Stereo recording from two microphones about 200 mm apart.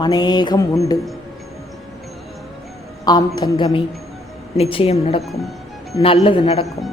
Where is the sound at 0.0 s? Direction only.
20° left (ahead or behind).